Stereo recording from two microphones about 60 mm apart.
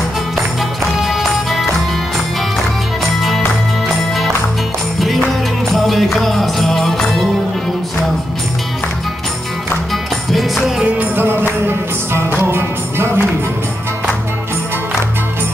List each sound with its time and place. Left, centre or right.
1.0 s music: centre
3.2 s music: centre
5.0 s music: centre
10.3 s music: centre
11.0 s music: right
12.4 s music: right